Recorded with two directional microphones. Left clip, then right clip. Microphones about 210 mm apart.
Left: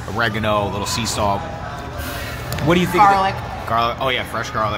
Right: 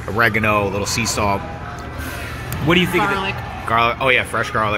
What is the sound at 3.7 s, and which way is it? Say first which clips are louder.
Speech: right 3 dB; 15° right (ahead or behind).